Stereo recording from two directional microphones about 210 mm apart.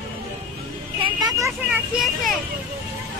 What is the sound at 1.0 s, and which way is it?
Speech, 20° right (ahead or behind).